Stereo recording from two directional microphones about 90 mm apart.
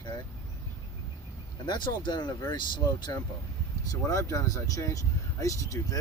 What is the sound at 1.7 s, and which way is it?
Speech, 60° left (ahead or behind).